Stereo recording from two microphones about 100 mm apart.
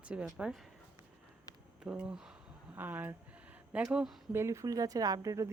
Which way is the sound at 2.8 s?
20° right (ahead or behind).